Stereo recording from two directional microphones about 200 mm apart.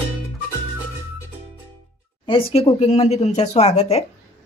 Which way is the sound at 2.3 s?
30° left (ahead or behind).